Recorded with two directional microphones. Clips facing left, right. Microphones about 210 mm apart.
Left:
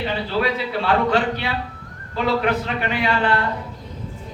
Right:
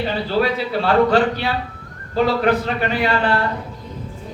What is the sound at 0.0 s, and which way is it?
A man's voice, 40° right (ahead or behind).